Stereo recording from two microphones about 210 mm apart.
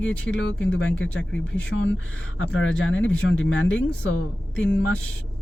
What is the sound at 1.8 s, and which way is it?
Speech, 65° left (ahead or behind).